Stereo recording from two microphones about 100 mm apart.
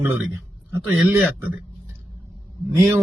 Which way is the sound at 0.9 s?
15° right (ahead or behind).